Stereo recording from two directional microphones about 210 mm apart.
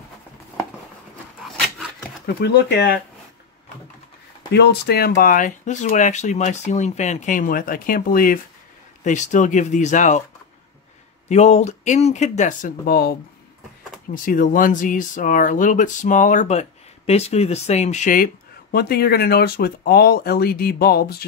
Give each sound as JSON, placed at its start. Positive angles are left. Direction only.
{"t": 2.2, "sound": "speech", "side_deg": 50}
{"t": 4.5, "sound": "speech", "side_deg": 50}
{"t": 11.2, "sound": "speech", "side_deg": 30}
{"t": 14.1, "sound": "speech", "side_deg": 40}